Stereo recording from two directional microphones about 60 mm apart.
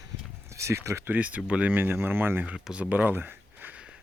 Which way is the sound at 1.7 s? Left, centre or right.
Right.